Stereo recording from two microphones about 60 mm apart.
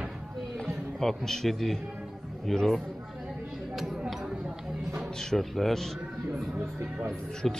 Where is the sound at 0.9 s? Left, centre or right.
Centre.